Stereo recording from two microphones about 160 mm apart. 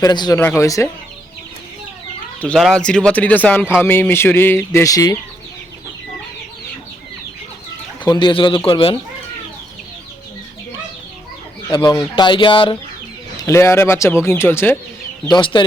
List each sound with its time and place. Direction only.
0.0 s speech: 25° left (ahead or behind)
2.4 s speech: 5° left (ahead or behind); by 5.1 s 20° left (ahead or behind)
8.0 s speech: 25° left (ahead or behind)
11.7 s speech: 30° left (ahead or behind)
13.4 s speech: 15° left (ahead or behind)
15.3 s speech: 30° left (ahead or behind)